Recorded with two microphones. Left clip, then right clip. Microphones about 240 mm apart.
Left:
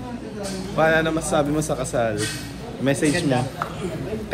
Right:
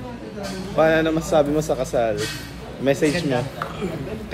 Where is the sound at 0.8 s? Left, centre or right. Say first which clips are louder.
Right 1 dB; centre.